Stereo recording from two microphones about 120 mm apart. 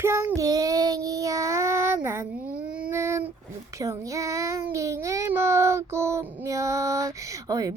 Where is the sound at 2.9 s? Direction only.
20° right (ahead or behind).